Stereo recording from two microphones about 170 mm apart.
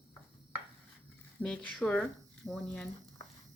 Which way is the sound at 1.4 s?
5° left (ahead or behind).